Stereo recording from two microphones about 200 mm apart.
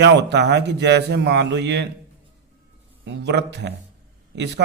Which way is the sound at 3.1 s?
55° right (ahead or behind).